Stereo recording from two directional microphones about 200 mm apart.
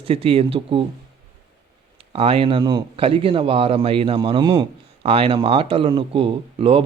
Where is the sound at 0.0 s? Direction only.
30° right (ahead or behind).